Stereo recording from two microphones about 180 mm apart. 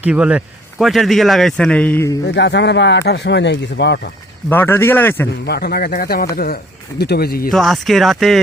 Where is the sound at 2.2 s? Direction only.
70° left (ahead or behind).